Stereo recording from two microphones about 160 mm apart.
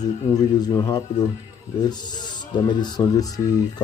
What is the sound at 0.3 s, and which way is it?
Speech, 25° left (ahead or behind).